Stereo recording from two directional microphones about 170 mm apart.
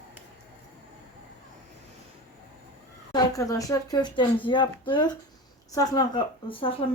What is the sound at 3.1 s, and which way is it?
Speech, 20° left (ahead or behind).